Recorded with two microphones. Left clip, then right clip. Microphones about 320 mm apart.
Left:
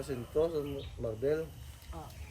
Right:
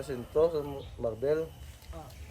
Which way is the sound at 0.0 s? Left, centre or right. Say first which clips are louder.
Right 5 dB; centre.